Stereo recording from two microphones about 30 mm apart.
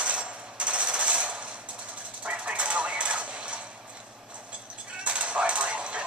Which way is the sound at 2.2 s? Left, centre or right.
Right.